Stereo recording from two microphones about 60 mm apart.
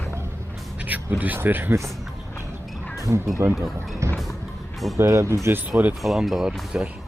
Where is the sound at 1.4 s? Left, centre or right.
Right.